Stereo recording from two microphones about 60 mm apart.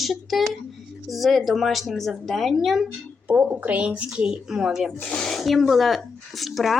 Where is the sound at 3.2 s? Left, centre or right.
Right.